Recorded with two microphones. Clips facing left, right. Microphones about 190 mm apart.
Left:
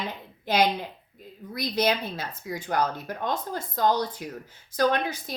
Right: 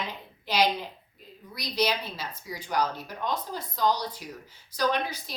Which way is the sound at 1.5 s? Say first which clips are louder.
Left 3 dB; 50° left (ahead or behind).